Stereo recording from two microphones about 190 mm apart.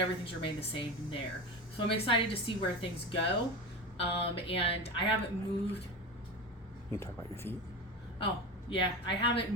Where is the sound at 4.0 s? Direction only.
30° left (ahead or behind).